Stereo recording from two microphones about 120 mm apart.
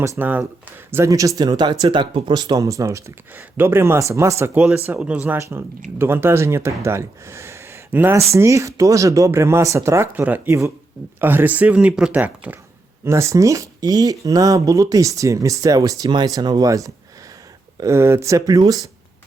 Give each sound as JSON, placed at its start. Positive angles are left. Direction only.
{"t": 0.2, "sound": "speech", "side_deg": -15}
{"t": 4.5, "sound": "speech", "side_deg": -10}
{"t": 13.1, "sound": "speech", "side_deg": -25}